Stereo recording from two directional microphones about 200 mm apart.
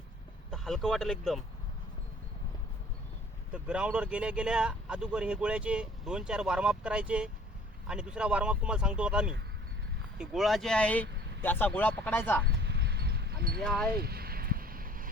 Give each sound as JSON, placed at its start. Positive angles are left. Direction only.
{"t": 0.5, "sound": "speech", "side_deg": 0}
{"t": 3.5, "sound": "speech", "side_deg": -5}
{"t": 12.6, "sound": "a sound", "side_deg": -55}
{"t": 13.6, "sound": "speech", "side_deg": 5}
{"t": 14.0, "sound": "vehicle", "side_deg": -50}